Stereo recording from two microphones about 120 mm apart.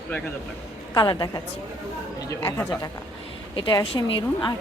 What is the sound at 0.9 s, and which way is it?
A woman's voice, 35° left (ahead or behind).